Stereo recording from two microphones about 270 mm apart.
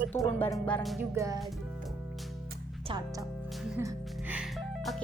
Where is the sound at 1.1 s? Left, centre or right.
Centre.